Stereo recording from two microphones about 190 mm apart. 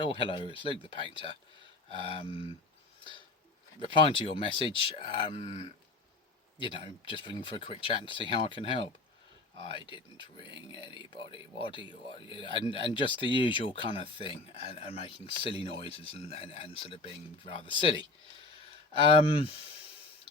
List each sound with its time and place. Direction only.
0.0 s speech: 30° left (ahead or behind)
3.0 s a sound: 25° left (ahead or behind)
3.8 s speech: 25° left (ahead or behind)